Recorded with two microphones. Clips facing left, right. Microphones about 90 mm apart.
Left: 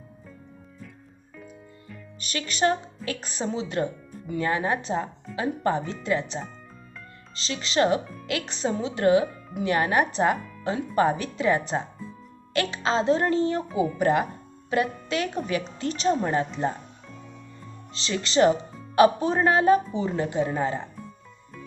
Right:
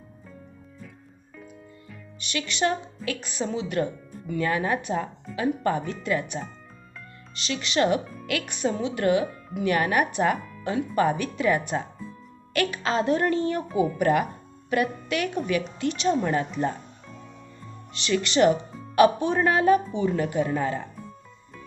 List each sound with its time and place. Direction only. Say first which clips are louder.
2.2 s a woman's voice: left 2 dB; 40° left (ahead or behind)
8.0 s music: right 1 dB; centre (ahead or behind)
8.3 s a woman's voice: right 1 dB; 30° left (ahead or behind)
17.9 s a woman's voice: right 1 dB; 30° left (ahead or behind)